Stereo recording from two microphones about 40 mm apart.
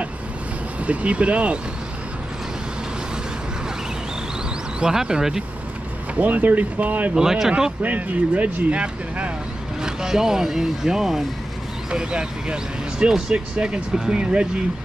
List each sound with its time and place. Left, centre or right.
0.8 s speech: right
4.7 s speech: centre
6.1 s speech: right
7.2 s speech: centre
7.8 s speech: right
9.8 s speech: centre
11.9 s speech: right